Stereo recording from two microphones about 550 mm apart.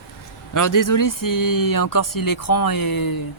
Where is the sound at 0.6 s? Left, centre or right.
Left.